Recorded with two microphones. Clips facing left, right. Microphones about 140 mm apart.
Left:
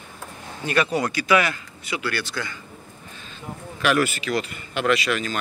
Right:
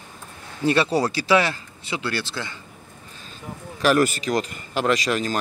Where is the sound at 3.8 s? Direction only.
40° right (ahead or behind).